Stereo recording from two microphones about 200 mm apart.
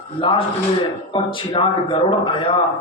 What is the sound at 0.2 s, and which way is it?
A man's voice, 25° left (ahead or behind).